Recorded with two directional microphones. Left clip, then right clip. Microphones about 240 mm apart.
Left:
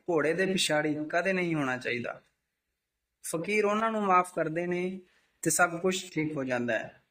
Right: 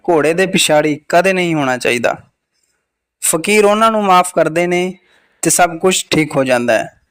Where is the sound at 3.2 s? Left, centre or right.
Right.